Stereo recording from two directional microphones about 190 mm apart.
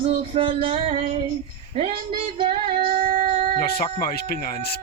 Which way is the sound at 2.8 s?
50° right (ahead or behind).